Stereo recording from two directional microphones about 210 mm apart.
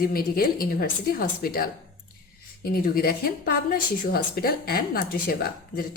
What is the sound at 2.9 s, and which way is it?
A woman's voice, 45° left (ahead or behind).